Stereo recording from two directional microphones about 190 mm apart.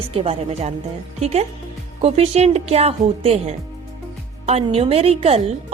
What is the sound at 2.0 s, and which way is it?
A woman's voice, 35° right (ahead or behind).